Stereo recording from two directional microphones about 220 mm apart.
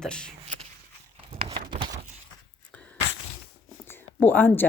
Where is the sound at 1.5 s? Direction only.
25° right (ahead or behind).